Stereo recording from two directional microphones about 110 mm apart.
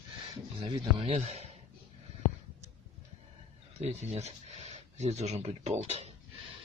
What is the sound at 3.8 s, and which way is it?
Speech, 85° right.